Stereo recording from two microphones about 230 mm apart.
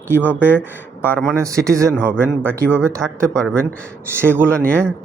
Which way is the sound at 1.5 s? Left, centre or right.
Centre.